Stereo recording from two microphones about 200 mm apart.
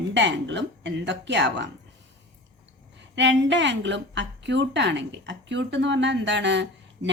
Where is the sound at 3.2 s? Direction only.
65° right (ahead or behind).